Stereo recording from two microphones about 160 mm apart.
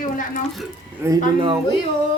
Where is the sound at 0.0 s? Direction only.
55° left (ahead or behind).